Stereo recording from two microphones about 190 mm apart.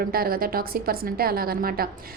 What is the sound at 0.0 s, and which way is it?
A woman's voice, 50° right (ahead or behind).